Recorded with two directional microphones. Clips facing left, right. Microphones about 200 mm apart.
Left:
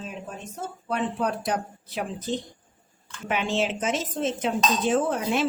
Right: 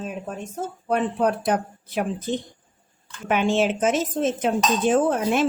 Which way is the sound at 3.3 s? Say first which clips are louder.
Right 5 dB; 50° right (ahead or behind).